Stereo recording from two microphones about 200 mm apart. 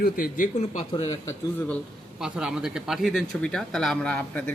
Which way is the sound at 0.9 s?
20° left (ahead or behind).